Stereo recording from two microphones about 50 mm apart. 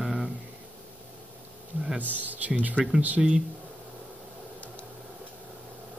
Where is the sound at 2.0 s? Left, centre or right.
Right.